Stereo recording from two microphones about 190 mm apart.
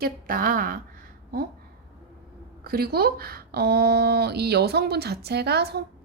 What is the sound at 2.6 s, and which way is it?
Speech, 55° right (ahead or behind).